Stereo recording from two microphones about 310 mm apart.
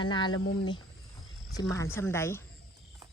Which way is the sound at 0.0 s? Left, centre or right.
Centre.